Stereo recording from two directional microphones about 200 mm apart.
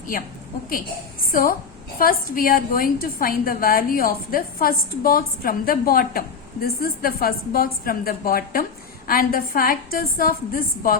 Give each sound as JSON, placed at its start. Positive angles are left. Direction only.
{"t": 1.3, "sound": "a woman's voice", "side_deg": 45}